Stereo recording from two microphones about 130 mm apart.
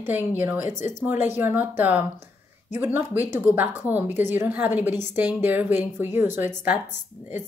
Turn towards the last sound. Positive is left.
turn(degrees=-15)  # may be behind; listen again after turning